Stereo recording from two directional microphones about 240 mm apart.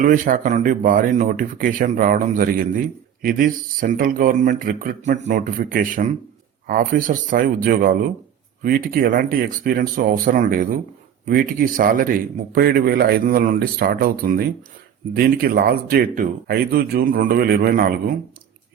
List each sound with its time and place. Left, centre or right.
0.0 s speech: right